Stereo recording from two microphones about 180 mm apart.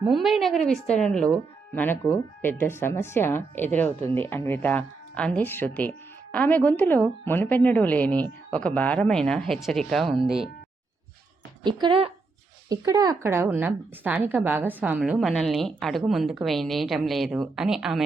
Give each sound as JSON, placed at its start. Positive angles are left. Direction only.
{"t": 0.0, "sound": "speech", "side_deg": 0}
{"t": 11.6, "sound": "a woman's voice", "side_deg": -25}